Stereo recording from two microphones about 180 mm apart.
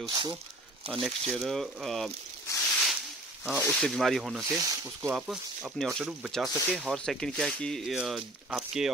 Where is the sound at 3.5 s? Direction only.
5° left (ahead or behind).